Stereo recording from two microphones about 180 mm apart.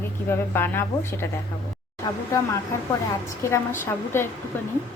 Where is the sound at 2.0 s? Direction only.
25° left (ahead or behind).